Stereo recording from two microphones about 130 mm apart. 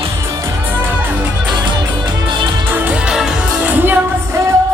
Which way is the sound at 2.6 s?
15° right (ahead or behind).